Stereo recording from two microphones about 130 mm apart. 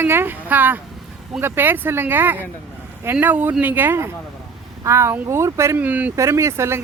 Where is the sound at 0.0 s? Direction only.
15° right (ahead or behind).